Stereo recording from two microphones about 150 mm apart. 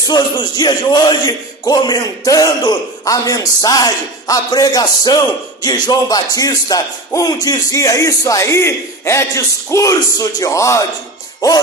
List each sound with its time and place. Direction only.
0.1 s speech: 30° left (ahead or behind)